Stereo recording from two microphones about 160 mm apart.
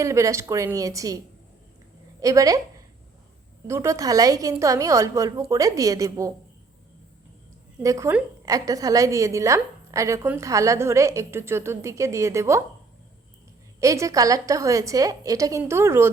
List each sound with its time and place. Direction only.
0.0 s a woman's voice: 20° right (ahead or behind)
2.2 s a woman's voice: 20° right (ahead or behind)
3.7 s a woman's voice: 20° right (ahead or behind)
7.8 s a woman's voice: 20° right (ahead or behind)
13.7 s a woman's voice: 20° right (ahead or behind)